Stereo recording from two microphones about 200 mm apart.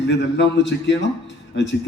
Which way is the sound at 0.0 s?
60° left (ahead or behind).